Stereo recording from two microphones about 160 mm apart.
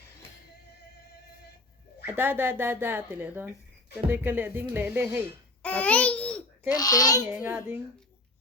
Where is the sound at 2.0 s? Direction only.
10° right (ahead or behind).